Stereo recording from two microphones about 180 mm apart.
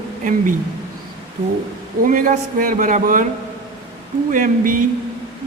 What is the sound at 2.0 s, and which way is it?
A man's voice, 50° right (ahead or behind).